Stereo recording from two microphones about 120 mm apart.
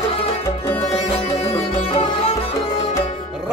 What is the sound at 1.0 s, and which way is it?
Music, 60° left (ahead or behind).